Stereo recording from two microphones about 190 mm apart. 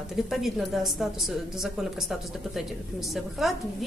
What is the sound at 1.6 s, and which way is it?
A woman's voice, centre (ahead or behind).